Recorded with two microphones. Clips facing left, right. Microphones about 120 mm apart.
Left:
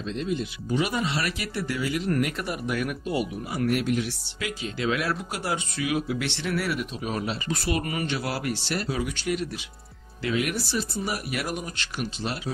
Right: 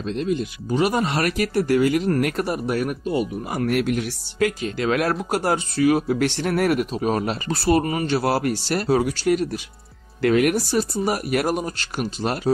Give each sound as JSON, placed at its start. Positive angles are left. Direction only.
{"t": 0.1, "sound": "speech", "side_deg": -50}
{"t": 10.2, "sound": "speech", "side_deg": -55}